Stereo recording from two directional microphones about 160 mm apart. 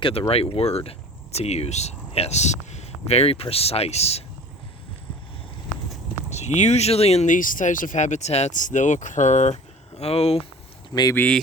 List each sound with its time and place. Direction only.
0.0 s speech: 35° left (ahead or behind)
6.3 s speech: 45° left (ahead or behind)
11.1 s speech: 10° left (ahead or behind)